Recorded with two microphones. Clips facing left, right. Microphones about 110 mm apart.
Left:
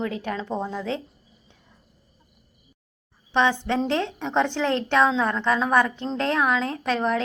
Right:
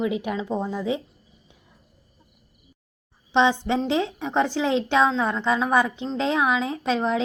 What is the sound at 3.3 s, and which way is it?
A woman's voice, 20° right (ahead or behind).